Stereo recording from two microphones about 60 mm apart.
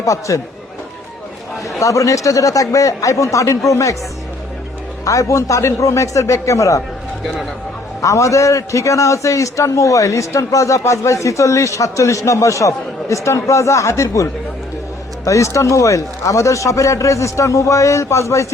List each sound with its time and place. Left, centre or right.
0.0 s a man's voice: left
1.8 s a man's voice: left
5.0 s a man's voice: left
8.0 s a man's voice: left